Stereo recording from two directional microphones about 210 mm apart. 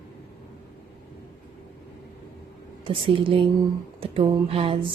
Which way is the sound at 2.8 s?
25° right (ahead or behind).